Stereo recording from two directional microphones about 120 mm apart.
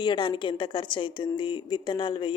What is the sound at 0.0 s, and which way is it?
A woman's voice, 40° left (ahead or behind).